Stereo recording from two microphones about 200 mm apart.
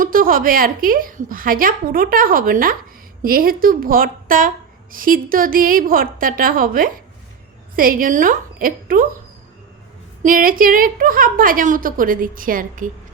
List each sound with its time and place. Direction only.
0.0 s a woman's voice: 45° right (ahead or behind)
10.2 s a woman's voice: 45° right (ahead or behind)